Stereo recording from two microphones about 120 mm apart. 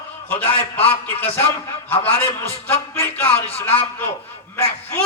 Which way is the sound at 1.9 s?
20° left (ahead or behind).